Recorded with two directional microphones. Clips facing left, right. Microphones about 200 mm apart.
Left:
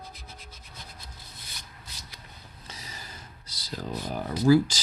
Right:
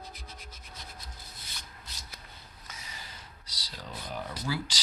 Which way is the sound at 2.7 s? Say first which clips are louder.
Left 3 dB; 35° left (ahead or behind).